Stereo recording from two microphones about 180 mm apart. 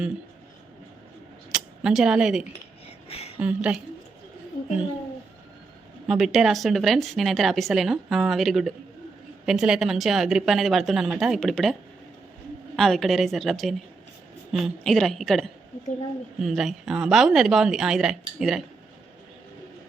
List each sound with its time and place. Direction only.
1.5 s speech: 5° right (ahead or behind)
2.8 s a sound: 35° left (ahead or behind)
3.3 s speech: 5° right (ahead or behind)
6.1 s speech: centre (ahead or behind)